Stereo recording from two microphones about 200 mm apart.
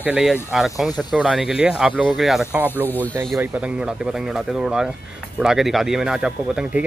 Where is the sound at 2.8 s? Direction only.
10° left (ahead or behind).